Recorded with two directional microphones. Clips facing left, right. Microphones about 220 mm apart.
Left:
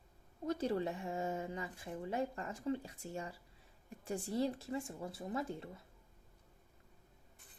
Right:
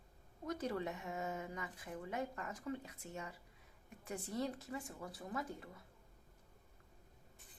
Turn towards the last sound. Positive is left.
turn(degrees=25)  # may be behind; listen again after turning